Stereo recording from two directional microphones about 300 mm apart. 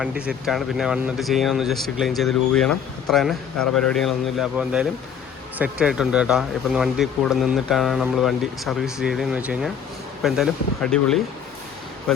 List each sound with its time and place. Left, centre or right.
0.0 s speech: centre